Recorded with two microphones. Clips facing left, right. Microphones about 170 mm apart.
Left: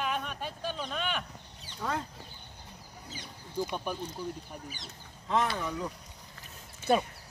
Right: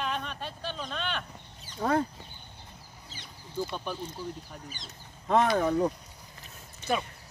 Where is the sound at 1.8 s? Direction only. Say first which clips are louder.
Right 7 dB; 45° right (ahead or behind).